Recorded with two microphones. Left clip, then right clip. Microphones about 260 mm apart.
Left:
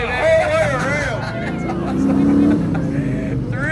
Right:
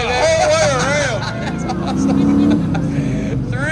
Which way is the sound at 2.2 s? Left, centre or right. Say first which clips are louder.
Even; centre.